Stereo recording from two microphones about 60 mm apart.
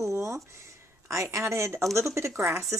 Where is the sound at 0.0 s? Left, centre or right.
Right.